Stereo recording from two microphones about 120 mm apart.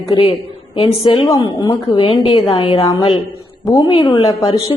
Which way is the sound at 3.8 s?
50° left (ahead or behind).